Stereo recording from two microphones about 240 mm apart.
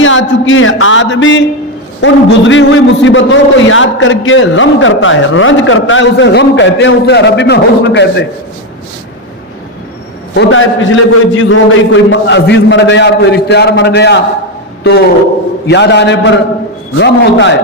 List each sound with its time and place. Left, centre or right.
0.0 s a man's voice: left
10.3 s a man's voice: left
15.6 s a man's voice: left